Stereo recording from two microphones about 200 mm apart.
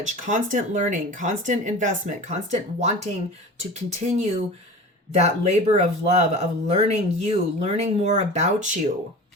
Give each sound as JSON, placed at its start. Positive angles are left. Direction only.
{"t": 0.0, "sound": "speech", "side_deg": -40}